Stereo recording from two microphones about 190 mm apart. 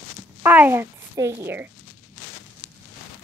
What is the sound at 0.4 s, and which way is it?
A woman's voice, 10° right (ahead or behind).